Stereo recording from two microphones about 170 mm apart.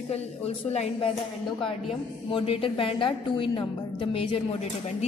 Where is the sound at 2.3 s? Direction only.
35° left (ahead or behind).